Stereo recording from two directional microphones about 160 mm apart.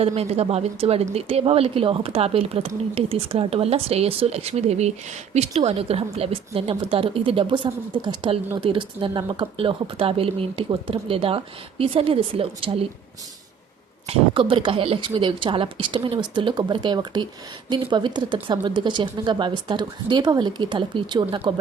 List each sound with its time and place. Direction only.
0.0 s a woman's voice: 40° right (ahead or behind)
14.1 s a woman's voice: 35° right (ahead or behind)